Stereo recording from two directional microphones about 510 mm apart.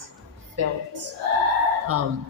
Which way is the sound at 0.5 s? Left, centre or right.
Right.